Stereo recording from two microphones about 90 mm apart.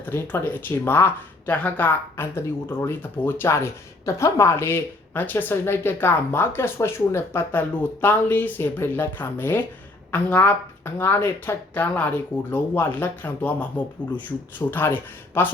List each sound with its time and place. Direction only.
0.0 s speech: 20° left (ahead or behind)